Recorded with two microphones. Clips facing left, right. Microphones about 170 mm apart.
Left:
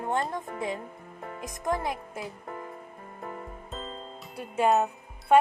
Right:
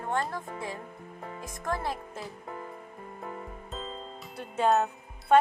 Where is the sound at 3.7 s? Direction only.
Centre (ahead or behind).